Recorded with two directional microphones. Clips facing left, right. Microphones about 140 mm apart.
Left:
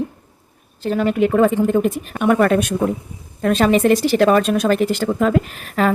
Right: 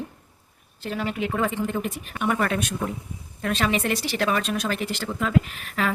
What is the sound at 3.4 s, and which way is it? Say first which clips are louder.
Speech: left 10 dB; 40° left (ahead or behind).